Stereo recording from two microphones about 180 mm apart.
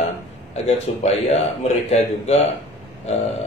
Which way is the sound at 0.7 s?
35° left (ahead or behind).